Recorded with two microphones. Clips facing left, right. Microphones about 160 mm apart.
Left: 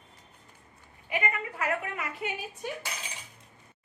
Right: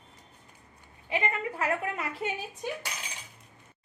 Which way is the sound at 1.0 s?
25° right (ahead or behind).